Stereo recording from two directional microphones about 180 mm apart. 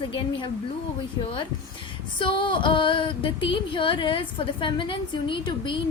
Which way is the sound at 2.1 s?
25° left (ahead or behind).